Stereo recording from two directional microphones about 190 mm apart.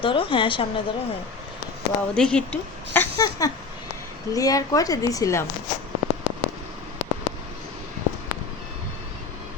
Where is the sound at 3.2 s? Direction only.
20° left (ahead or behind).